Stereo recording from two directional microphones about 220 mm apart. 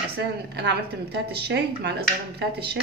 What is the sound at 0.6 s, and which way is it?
Speech, 50° right (ahead or behind).